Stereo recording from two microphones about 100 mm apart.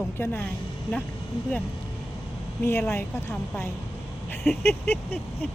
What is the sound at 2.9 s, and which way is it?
A woman's voice, 25° left (ahead or behind).